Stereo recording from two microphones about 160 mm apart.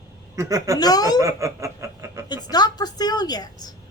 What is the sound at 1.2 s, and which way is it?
Speech, 20° right (ahead or behind).